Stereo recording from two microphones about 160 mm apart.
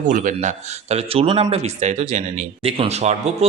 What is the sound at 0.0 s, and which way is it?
Speech, 55° right (ahead or behind).